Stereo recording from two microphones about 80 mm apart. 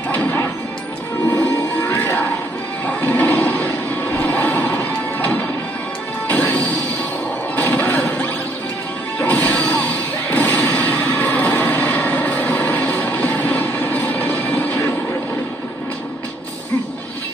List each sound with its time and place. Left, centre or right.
0.1 s smash: centre
1.3 s music: left
2.9 s a sound: left
6.2 s music: left
9.2 s smash: left